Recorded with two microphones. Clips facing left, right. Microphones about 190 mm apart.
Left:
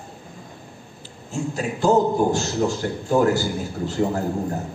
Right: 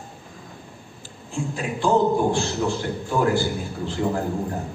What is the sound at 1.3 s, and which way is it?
A man's voice, 40° left (ahead or behind).